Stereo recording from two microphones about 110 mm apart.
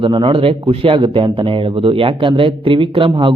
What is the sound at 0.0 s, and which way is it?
Speech, 45° right (ahead or behind).